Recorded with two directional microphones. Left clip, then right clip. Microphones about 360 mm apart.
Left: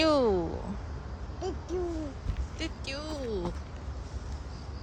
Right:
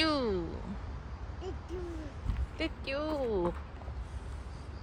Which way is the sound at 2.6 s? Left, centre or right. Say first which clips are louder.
Right 2 dB; centre.